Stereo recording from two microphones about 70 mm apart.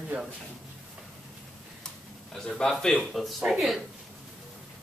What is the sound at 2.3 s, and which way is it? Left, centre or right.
A man's voice, centre.